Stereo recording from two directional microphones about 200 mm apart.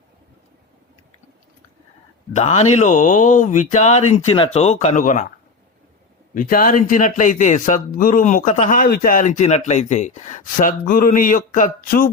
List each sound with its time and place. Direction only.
2.3 s a man's voice: 35° left (ahead or behind)
6.3 s a man's voice: 45° left (ahead or behind)